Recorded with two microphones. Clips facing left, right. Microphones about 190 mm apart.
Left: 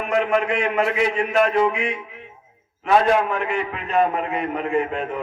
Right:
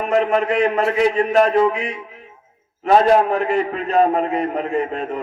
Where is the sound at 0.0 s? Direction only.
40° right (ahead or behind).